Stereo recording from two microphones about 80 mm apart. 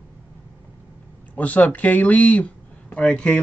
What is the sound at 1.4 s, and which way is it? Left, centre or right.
Speech, centre.